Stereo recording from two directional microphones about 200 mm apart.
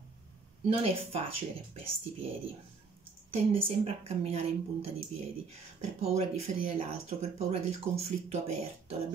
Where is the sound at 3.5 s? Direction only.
30° right (ahead or behind).